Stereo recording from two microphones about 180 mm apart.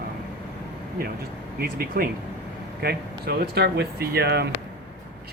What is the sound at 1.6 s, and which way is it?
Speech, 55° right (ahead or behind).